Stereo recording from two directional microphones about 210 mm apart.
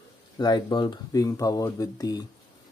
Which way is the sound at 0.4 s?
20° left (ahead or behind).